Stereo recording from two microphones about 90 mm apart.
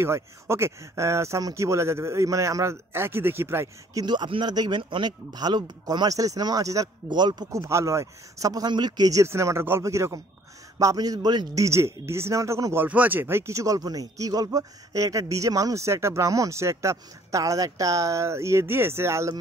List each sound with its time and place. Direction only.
0.0 s speech: 30° right (ahead or behind)
3.9 s speech: 55° right (ahead or behind); by 6.9 s 40° right (ahead or behind)
7.1 s speech: 55° right (ahead or behind)
7.5 s speech: 35° right (ahead or behind)
8.6 s speech: 50° right (ahead or behind)
9.2 s speech: 30° right (ahead or behind)
11.6 s speech: 30° right (ahead or behind)
12.7 s speech: 20° right (ahead or behind)